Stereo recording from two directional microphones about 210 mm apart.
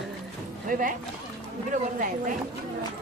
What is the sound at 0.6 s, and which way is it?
Speech, 40° right (ahead or behind).